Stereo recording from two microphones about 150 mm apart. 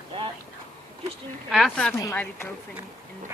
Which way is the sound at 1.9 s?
15° left (ahead or behind).